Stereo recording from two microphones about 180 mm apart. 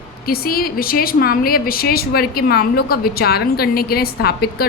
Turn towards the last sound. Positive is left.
turn(degrees=60)  # may be behind; listen again after turning